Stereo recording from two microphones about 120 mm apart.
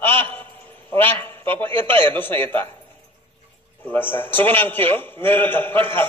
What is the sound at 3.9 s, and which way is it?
A man's voice, 15° left (ahead or behind).